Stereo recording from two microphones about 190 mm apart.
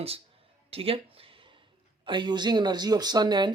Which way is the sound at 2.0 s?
25° right (ahead or behind).